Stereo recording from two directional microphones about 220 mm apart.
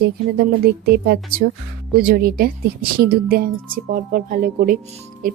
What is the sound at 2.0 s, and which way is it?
Speech, 40° right (ahead or behind).